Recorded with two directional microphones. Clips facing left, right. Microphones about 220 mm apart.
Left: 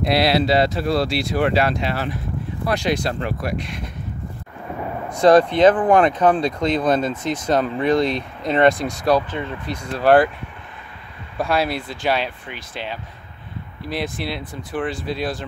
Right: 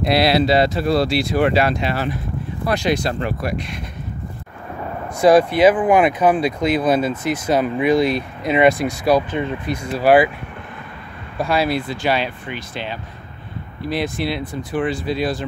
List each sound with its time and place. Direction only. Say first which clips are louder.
0.1 s speech: right 2 dB; 10° right (ahead or behind)
5.2 s speech: even; 10° right (ahead or behind)
11.3 s speech: right 2 dB; centre (ahead or behind)